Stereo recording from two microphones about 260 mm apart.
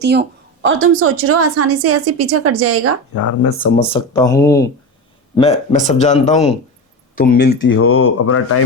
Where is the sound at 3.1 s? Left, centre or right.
Left.